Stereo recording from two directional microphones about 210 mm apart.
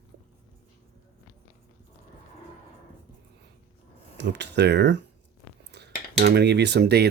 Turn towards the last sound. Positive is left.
turn(degrees=-50)  # may be behind; listen again after turning